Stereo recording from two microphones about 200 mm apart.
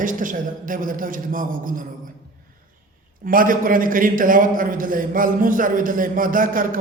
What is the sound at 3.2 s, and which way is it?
A man's voice, 45° right (ahead or behind).